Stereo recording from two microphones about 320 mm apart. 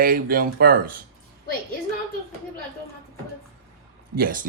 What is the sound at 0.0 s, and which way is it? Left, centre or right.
Speech, right.